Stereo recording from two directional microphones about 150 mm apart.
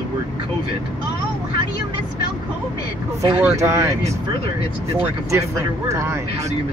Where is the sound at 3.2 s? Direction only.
20° right (ahead or behind).